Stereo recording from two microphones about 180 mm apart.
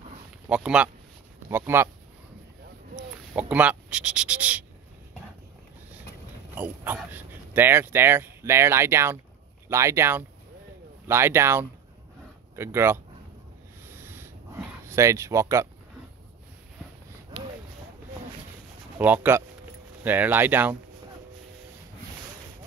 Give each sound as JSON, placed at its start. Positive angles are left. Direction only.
{"t": 0.5, "sound": "speech", "side_deg": -5}
{"t": 3.3, "sound": "speech", "side_deg": -10}
{"t": 6.5, "sound": "speech", "side_deg": -10}
{"t": 13.8, "sound": "a sound", "side_deg": -15}
{"t": 18.9, "sound": "speech", "side_deg": -10}